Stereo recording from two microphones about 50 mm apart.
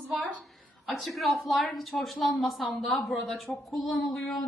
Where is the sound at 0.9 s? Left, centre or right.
Centre.